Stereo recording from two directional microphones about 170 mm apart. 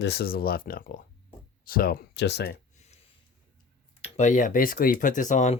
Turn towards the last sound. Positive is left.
turn(degrees=45)  # may be behind; listen again after turning